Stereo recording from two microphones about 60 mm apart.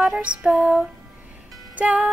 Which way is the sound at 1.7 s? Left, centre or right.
Right.